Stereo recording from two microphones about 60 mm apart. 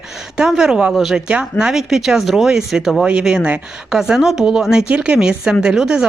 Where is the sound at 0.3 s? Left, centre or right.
Centre.